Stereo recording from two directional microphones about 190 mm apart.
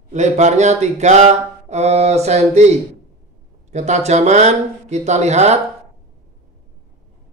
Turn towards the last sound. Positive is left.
turn(degrees=-35)  # may be behind; listen again after turning